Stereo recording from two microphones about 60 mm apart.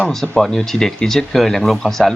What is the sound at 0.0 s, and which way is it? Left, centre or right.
Speech, centre.